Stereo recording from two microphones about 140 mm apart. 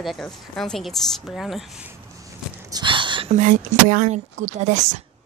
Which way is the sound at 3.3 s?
60° right (ahead or behind).